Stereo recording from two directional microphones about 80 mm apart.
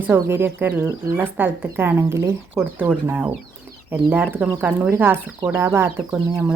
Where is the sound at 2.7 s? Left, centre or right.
Right.